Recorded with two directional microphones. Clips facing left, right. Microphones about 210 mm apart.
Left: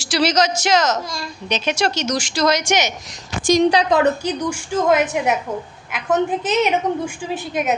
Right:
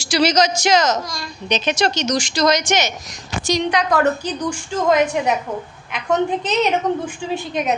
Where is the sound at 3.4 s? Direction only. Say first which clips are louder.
Left 6 dB; 50° left (ahead or behind).